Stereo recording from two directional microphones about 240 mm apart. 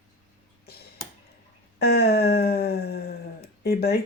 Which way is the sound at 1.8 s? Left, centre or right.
Left.